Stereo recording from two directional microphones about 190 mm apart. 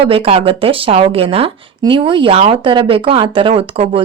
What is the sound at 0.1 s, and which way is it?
Speech, 30° right (ahead or behind).